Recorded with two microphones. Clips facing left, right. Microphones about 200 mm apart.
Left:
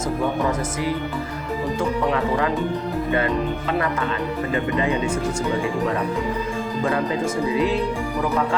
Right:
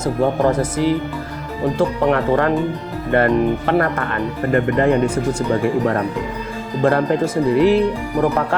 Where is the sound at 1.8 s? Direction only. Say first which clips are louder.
Right 5 dB; 65° right (ahead or behind).